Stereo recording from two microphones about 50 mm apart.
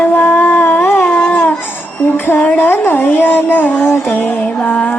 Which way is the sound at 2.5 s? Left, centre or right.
Left.